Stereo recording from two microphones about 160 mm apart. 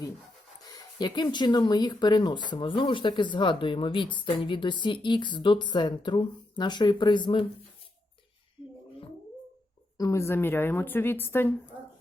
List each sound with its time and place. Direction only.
0.6 s speech: 25° left (ahead or behind)
10.0 s a woman's voice: 20° left (ahead or behind)